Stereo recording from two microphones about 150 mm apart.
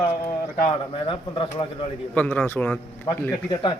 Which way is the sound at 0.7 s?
35° left (ahead or behind).